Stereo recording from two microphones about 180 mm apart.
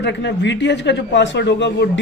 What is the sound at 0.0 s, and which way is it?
Speech, 70° left (ahead or behind).